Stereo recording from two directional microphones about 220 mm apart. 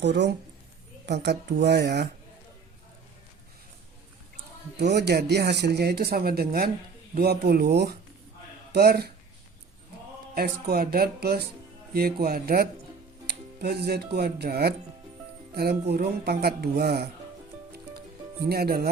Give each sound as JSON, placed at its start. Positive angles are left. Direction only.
{"t": 0.0, "sound": "speech", "side_deg": -50}
{"t": 4.8, "sound": "speech", "side_deg": -50}
{"t": 10.3, "sound": "speech", "side_deg": -45}
{"t": 18.4, "sound": "speech", "side_deg": -45}